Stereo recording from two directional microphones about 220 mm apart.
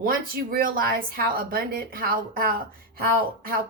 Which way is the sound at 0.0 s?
40° right (ahead or behind).